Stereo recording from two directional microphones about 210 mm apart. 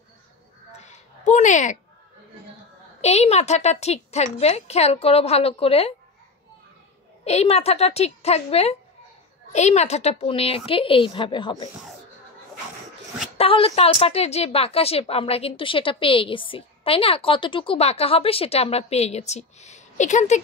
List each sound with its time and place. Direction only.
0.7 s a sound: 35° left (ahead or behind)
3.0 s a woman's voice: 30° left (ahead or behind)
7.2 s a woman's voice: 30° left (ahead or behind)
13.4 s a woman's voice: 25° left (ahead or behind)